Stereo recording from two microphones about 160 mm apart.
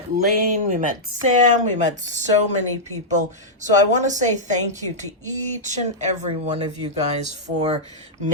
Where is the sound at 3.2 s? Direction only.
50° right (ahead or behind).